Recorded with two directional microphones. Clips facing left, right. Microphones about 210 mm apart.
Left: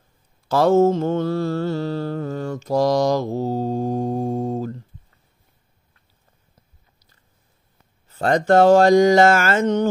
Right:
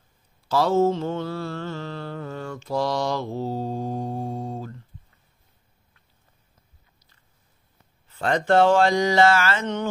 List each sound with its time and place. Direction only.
0.5 s mantra: 50° left (ahead or behind)
8.1 s mantra: 40° left (ahead or behind)